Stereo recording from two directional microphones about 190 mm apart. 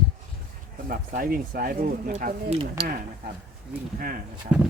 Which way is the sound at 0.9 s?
50° right (ahead or behind).